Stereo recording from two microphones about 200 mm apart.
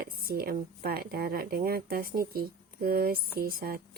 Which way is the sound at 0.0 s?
50° right (ahead or behind).